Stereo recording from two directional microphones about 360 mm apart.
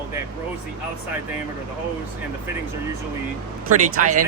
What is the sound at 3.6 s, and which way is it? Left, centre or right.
Speech, right.